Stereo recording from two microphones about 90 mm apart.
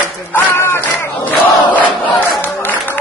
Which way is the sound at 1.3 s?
20° left (ahead or behind).